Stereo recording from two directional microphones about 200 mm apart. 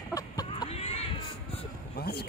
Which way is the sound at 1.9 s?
55° left (ahead or behind).